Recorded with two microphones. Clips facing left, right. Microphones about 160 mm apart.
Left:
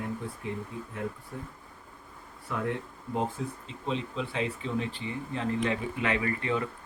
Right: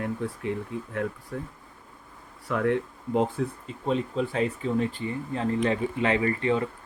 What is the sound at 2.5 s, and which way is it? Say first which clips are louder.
Speech: right 7 dB; 80° right.